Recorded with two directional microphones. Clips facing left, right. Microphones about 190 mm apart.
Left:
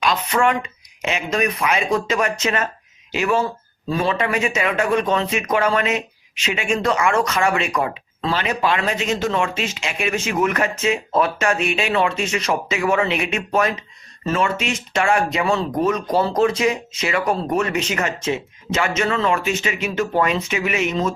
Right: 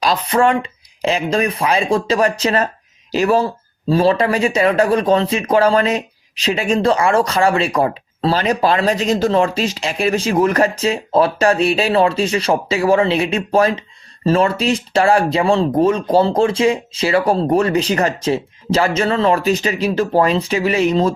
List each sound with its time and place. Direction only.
0.0 s speech: 35° right (ahead or behind)